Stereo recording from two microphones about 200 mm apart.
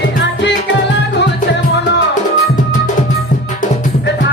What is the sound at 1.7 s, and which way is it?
Music, 60° left (ahead or behind).